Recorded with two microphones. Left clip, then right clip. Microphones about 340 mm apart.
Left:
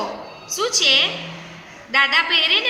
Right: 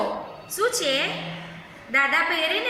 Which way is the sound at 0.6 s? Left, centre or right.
Centre.